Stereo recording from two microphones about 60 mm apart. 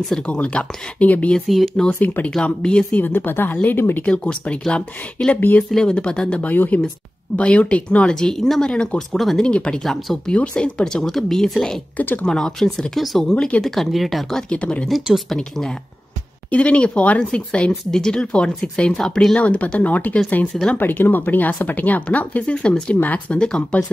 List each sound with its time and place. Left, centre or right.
0.3 s speech: centre
3.0 s speech: left
4.0 s speech: centre
6.5 s speech: left; by 9.4 s centre
9.4 s speech: centre
12.0 s speech: left
12.3 s speech: centre
13.3 s speech: centre
13.7 s speech: centre
14.5 s speech: centre
15.1 s speech: centre
16.4 s speech: left